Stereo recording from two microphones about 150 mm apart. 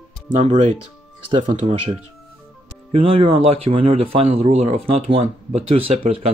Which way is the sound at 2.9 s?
40° right (ahead or behind).